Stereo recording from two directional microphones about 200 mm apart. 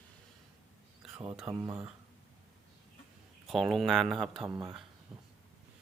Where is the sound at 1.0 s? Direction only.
5° right (ahead or behind).